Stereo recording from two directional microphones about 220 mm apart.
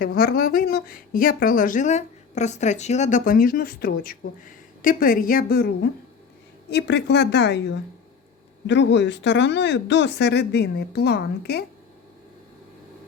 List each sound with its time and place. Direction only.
0.0 s a woman's voice: 45° left (ahead or behind)